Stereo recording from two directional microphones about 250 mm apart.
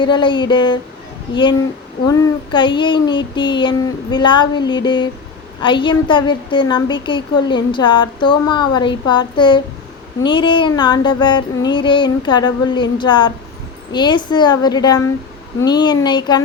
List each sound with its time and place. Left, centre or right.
0.0 s speech: centre
2.0 s a woman's voice: centre